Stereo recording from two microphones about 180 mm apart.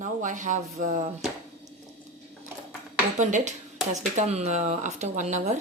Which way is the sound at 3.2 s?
40° right (ahead or behind).